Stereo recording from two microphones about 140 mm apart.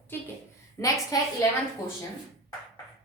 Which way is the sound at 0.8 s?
20° left (ahead or behind).